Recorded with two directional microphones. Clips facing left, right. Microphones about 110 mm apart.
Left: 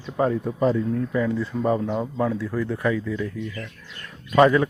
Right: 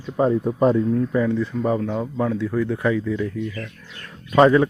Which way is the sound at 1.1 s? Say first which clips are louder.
Right 3 dB; 15° right (ahead or behind).